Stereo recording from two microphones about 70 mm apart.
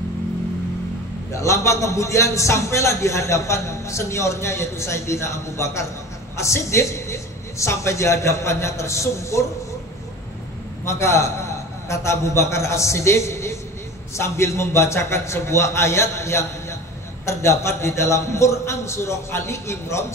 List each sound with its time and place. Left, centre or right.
1.3 s a man's voice: left
10.9 s a man's voice: left